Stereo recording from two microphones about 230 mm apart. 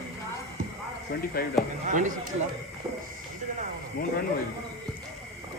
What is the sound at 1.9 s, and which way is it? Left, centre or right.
Speech, right.